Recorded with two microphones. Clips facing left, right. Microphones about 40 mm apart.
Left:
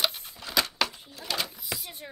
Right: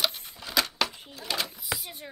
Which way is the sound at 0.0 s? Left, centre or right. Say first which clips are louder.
Even; centre.